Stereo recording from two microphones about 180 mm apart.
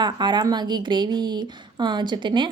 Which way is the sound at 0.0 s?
25° right (ahead or behind).